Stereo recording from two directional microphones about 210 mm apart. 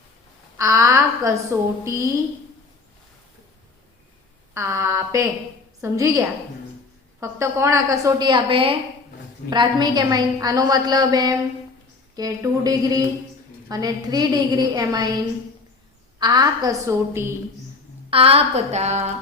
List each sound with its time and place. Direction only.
0.6 s a woman's voice: 15° right (ahead or behind)
4.5 s a woman's voice: 15° right (ahead or behind)
16.2 s a woman's voice: 20° right (ahead or behind)
18.1 s a woman's voice: 25° right (ahead or behind)